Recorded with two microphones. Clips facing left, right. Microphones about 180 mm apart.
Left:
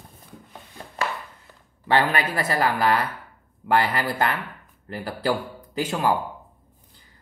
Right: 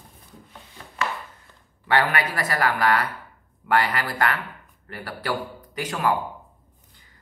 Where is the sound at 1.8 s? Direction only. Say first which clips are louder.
Left 1 dB; 25° left (ahead or behind).